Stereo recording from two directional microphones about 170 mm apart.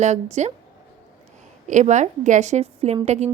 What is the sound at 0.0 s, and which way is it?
Speech, 40° right (ahead or behind).